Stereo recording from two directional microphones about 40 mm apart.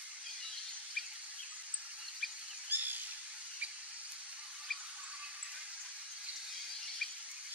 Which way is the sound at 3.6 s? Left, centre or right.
Right.